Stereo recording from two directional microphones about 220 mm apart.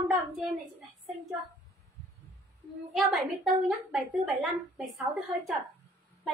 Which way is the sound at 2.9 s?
Centre (ahead or behind).